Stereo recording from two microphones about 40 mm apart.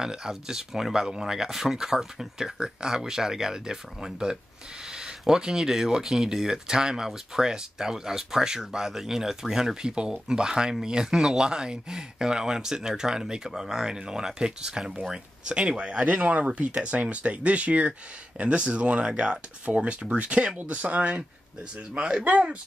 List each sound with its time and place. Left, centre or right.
0.0 s speech: centre
16.0 s speech: right